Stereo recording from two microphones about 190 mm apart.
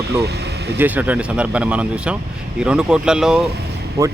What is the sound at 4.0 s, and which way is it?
Speech, 15° right (ahead or behind).